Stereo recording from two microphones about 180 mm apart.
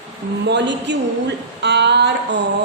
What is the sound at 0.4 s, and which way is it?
A woman's voice, 75° right (ahead or behind).